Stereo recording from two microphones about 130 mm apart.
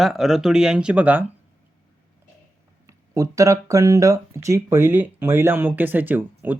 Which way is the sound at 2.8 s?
25° right (ahead or behind).